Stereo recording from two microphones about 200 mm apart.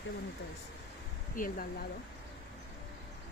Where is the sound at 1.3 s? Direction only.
45° left (ahead or behind).